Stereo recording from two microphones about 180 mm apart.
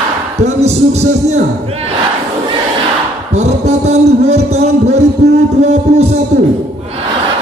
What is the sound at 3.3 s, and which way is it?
Music, 40° right (ahead or behind).